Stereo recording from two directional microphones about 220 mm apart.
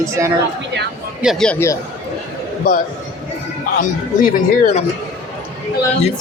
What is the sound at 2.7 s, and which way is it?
Speech, 35° left (ahead or behind).